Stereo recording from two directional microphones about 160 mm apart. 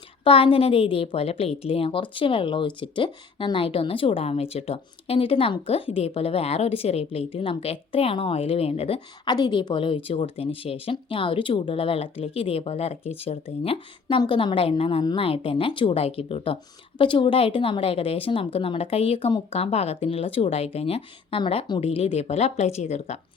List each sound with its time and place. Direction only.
0.3 s a woman's voice: 35° left (ahead or behind)
9.2 s a woman's voice: 25° left (ahead or behind); by 23.1 s 40° left (ahead or behind)